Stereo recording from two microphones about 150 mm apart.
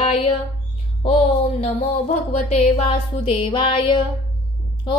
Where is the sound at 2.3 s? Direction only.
40° left (ahead or behind).